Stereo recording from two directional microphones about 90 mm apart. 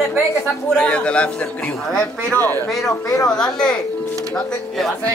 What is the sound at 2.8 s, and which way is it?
Speech, 40° left (ahead or behind).